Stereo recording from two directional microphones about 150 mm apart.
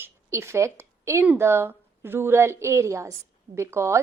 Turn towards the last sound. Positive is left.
turn(degrees=-20)  # may be behind; listen again after turning